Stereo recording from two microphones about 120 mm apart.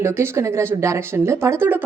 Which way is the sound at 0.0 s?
20° right (ahead or behind).